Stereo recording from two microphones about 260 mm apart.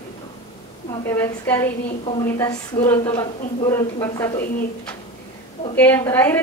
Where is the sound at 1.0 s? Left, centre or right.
Centre.